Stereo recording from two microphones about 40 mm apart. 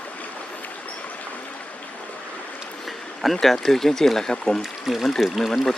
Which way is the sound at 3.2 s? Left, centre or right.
Centre.